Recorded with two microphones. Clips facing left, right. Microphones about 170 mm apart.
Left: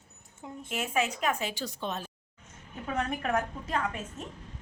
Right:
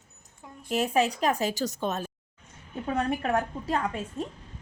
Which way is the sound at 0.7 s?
35° right (ahead or behind).